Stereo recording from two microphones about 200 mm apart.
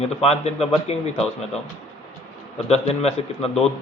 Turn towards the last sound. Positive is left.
turn(degrees=30)  # may be behind; listen again after turning